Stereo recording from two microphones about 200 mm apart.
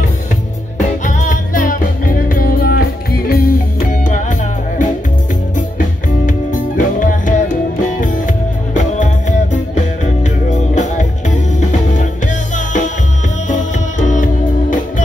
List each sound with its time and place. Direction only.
1.0 s music: 40° left (ahead or behind)